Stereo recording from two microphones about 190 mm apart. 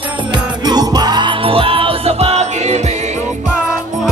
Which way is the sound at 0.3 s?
20° right (ahead or behind).